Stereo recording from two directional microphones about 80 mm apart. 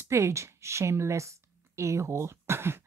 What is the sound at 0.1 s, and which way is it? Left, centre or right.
A woman's voice, right.